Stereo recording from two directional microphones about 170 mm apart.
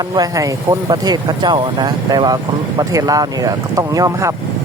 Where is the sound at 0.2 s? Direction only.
20° right (ahead or behind).